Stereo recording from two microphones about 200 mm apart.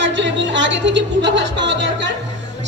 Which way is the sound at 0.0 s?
65° right (ahead or behind).